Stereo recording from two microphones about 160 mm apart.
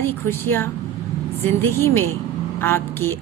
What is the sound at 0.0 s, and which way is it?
A woman's voice, 15° left (ahead or behind).